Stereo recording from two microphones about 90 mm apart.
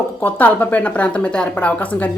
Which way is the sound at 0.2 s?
20° left (ahead or behind).